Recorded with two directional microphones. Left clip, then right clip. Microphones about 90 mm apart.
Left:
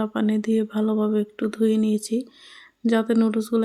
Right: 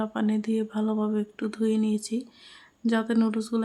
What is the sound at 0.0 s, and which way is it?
Speech, 30° left (ahead or behind).